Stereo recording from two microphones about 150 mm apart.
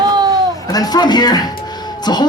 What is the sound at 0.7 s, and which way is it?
Speech, 25° left (ahead or behind).